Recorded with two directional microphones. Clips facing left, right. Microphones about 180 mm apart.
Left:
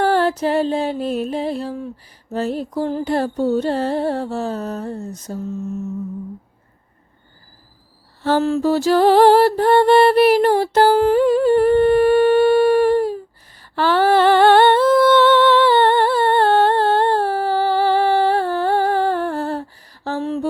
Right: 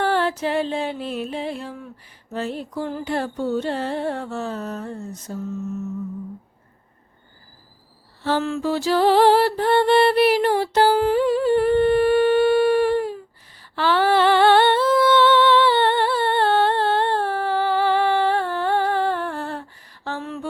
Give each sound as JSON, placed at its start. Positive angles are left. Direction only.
{"t": 0.0, "sound": "music", "side_deg": 40}
{"t": 2.3, "sound": "carnatic music", "side_deg": 40}
{"t": 8.2, "sound": "music", "side_deg": 40}
{"t": 13.6, "sound": "humming", "side_deg": 45}